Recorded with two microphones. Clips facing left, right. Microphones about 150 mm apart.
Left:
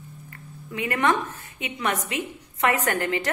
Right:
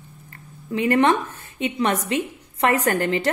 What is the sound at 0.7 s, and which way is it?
A woman's voice, 30° right (ahead or behind).